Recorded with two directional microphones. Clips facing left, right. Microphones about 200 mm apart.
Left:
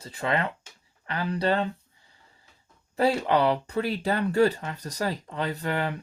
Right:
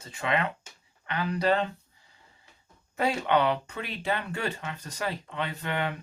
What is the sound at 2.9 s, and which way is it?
Speech, 35° left (ahead or behind).